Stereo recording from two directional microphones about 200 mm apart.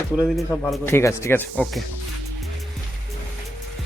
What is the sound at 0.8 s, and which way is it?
Speech, 15° left (ahead or behind).